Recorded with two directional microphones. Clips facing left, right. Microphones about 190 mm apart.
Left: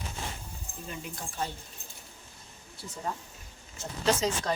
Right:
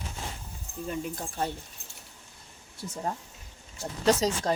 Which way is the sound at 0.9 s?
45° right (ahead or behind).